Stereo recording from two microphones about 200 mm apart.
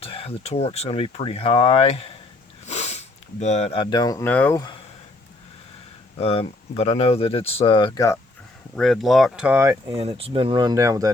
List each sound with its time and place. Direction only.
0.0 s speech: 30° left (ahead or behind)
2.6 s sniff: 35° left (ahead or behind)
3.4 s speech: 35° left (ahead or behind); by 4.8 s 20° left (ahead or behind)
6.1 s speech: 30° left (ahead or behind)
8.7 s speech: centre (ahead or behind)
9.9 s speech: 30° right (ahead or behind)